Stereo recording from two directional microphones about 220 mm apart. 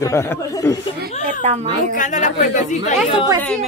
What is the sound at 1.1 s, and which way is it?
Speech, 35° left (ahead or behind).